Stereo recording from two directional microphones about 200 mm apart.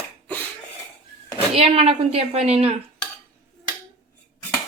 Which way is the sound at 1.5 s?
30° right (ahead or behind).